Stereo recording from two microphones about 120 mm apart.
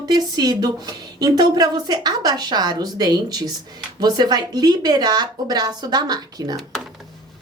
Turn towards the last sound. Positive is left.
turn(degrees=-35)  # may be behind; listen again after turning